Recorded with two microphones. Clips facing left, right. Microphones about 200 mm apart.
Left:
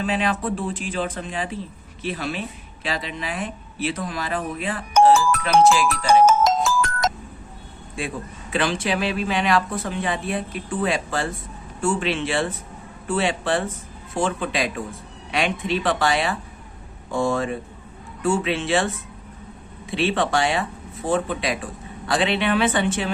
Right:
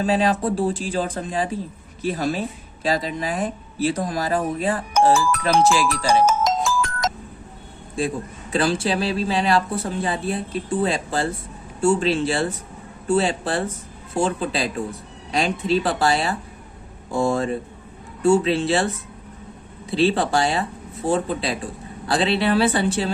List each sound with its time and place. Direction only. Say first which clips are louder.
0.0 s speech: right 4 dB; 35° right (ahead or behind)
7.9 s speech: right 5 dB; 35° right (ahead or behind)